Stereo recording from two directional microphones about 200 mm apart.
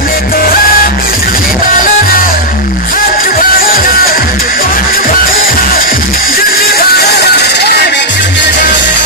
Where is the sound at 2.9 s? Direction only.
45° left (ahead or behind).